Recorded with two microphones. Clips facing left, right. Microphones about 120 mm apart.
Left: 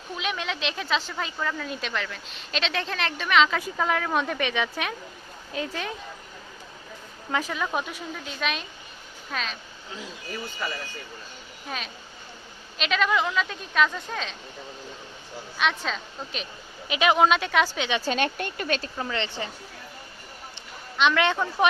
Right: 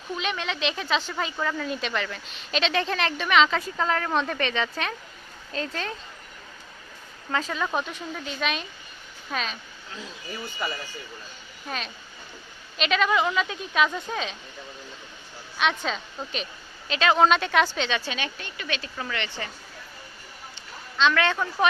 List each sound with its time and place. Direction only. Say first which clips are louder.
0.2 s a woman's voice: even; 5° left (ahead or behind)
7.3 s a woman's voice: even; 10° left (ahead or behind)
10.6 s speech: right 2 dB; 15° right (ahead or behind)
11.7 s a woman's voice: right 1 dB; centre (ahead or behind)
15.5 s a woman's voice: right 1 dB; centre (ahead or behind)
16.9 s speech: even; 15° left (ahead or behind)
17.2 s a woman's voice: right 1 dB; 5° left (ahead or behind)
18.0 s speech: left 7 dB; 45° left (ahead or behind)
18.9 s speech: left 2 dB; 25° left (ahead or behind)
21.0 s speech: left 1 dB; 20° left (ahead or behind)